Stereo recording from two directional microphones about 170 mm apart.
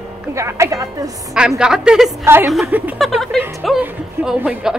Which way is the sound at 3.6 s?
5° right (ahead or behind).